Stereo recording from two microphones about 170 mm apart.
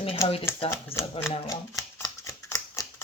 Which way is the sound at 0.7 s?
15° left (ahead or behind).